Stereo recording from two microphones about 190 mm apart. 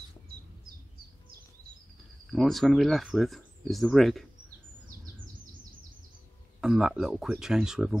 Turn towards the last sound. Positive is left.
turn(degrees=-5)  # may be behind; listen again after turning